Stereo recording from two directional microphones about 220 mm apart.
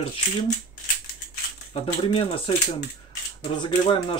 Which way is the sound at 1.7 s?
25° left (ahead or behind).